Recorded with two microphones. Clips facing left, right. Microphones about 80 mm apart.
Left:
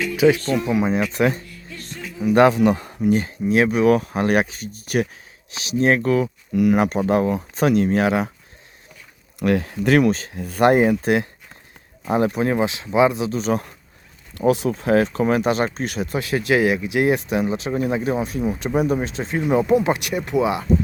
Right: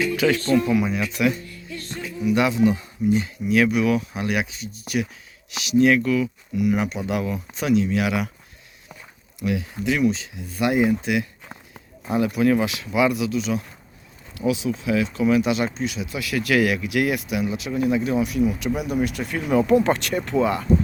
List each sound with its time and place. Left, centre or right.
0.2 s speech: centre
0.9 s speech: left
3.2 s speech: left
5.5 s speech: left
9.4 s speech: left; by 20.7 s centre